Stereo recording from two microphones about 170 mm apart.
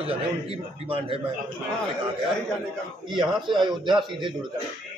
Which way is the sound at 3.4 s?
25° right (ahead or behind).